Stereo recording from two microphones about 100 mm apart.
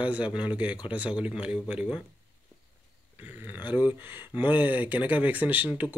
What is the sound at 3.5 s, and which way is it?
Speech, 20° right (ahead or behind).